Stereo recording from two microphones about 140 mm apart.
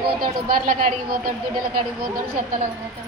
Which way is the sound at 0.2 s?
90° right.